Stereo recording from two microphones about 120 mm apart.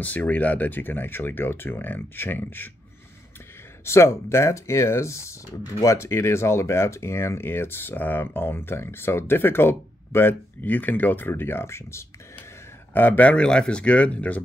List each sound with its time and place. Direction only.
0.0 s speech: 15° left (ahead or behind)
3.8 s speech: 20° left (ahead or behind)